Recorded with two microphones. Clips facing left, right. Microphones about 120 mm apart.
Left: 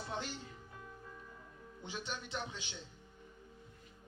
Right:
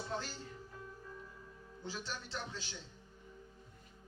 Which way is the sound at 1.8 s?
20° left (ahead or behind).